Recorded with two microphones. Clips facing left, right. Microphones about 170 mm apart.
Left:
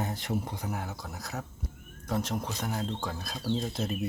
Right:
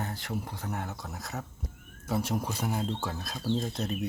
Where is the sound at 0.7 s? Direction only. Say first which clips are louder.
Even; centre (ahead or behind).